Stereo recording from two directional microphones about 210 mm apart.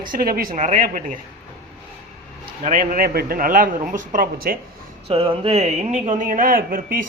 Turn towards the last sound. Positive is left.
turn(degrees=-45)  # may be behind; listen again after turning